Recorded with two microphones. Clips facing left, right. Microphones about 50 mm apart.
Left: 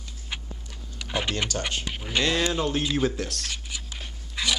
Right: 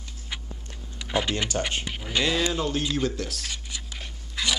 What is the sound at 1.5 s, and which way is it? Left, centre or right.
Speech, right.